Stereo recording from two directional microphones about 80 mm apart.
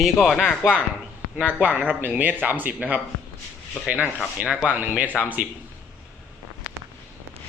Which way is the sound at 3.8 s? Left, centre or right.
Centre.